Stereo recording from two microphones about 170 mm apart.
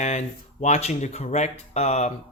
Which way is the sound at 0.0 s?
45° left (ahead or behind).